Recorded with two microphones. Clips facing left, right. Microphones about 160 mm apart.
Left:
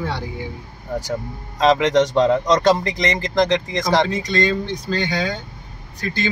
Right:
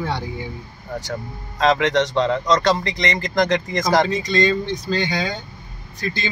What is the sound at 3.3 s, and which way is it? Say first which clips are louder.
Speech: left 1 dB; 5° right (ahead or behind).